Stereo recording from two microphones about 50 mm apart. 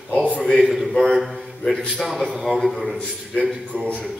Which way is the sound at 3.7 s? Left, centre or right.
Right.